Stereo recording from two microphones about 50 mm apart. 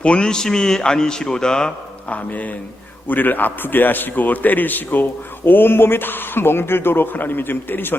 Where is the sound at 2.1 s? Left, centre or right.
Left.